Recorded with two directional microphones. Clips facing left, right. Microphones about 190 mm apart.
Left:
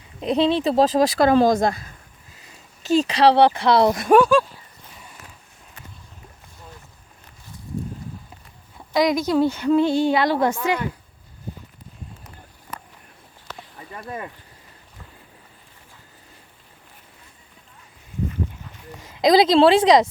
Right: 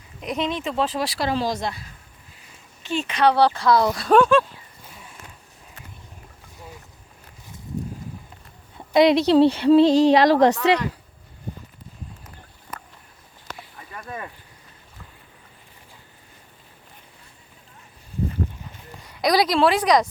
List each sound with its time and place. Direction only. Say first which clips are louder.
0.2 s speech: left 7 dB; 30° left (ahead or behind); by 1.9 s 50° left (ahead or behind)
2.8 s speech: left 4 dB; 35° left (ahead or behind); by 4.1 s 20° left (ahead or behind)
4.1 s speech: even; centre (ahead or behind)
8.9 s speech: right 4 dB; 25° right (ahead or behind)
9.8 s a woman's voice: right 4 dB; 90° right; by 10.8 s 75° right (ahead or behind)
13.9 s speech: left 2 dB; 25° left (ahead or behind)
19.1 s speech: left 5 dB; 25° left (ahead or behind)